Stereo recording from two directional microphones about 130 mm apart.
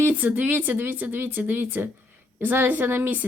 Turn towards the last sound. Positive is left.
turn(degrees=-15)  # may be behind; listen again after turning